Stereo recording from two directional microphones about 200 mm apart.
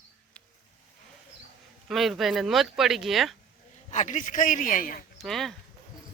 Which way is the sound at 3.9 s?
35° left (ahead or behind).